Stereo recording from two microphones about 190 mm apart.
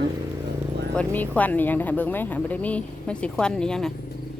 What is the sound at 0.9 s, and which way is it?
Speech, 10° left (ahead or behind).